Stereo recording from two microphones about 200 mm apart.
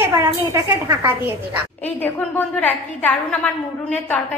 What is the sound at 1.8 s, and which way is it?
A woman's voice, 10° left (ahead or behind).